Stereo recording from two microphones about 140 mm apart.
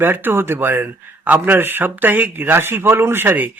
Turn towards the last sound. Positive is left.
turn(degrees=-15)  # may be behind; listen again after turning